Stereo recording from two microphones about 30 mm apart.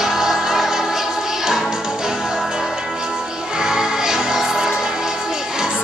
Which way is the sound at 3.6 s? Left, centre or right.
Right.